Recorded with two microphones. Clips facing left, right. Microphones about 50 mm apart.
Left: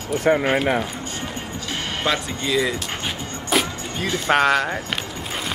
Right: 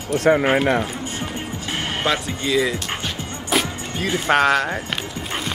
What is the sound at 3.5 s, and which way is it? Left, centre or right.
Music, centre.